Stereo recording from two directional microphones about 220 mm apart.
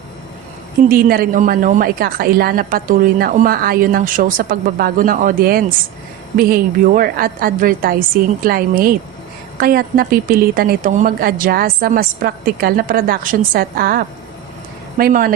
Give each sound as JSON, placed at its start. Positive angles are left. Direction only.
{"t": 0.9, "sound": "a woman's voice", "side_deg": -40}